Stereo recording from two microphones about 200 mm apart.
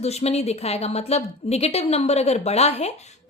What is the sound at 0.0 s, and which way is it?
A woman's voice, 30° left (ahead or behind).